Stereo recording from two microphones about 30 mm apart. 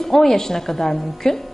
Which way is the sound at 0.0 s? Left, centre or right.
Centre.